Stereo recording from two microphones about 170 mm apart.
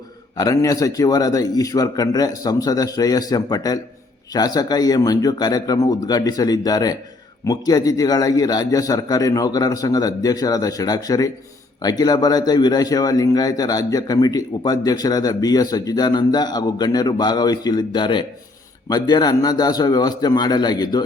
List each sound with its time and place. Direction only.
0.3 s speech: 20° left (ahead or behind)